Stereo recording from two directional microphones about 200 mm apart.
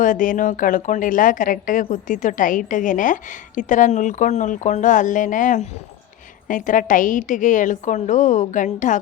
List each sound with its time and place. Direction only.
0.0 s a woman's voice: 40° left (ahead or behind)